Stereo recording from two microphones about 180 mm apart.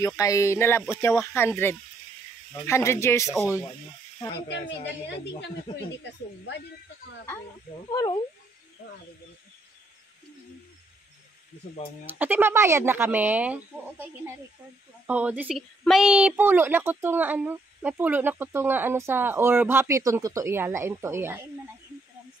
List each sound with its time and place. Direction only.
0.0 s a sound: 20° left (ahead or behind)
4.5 s a woman's voice: 75° left (ahead or behind)
7.9 s speech: 20° left (ahead or behind)
12.2 s a woman's voice: 10° right (ahead or behind)